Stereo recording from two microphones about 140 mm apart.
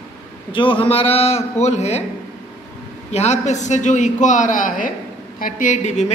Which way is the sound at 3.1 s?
55° left (ahead or behind).